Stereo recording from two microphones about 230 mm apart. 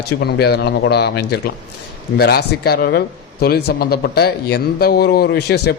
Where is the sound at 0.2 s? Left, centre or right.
Left.